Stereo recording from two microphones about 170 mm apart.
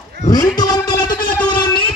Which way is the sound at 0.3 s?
25° left (ahead or behind).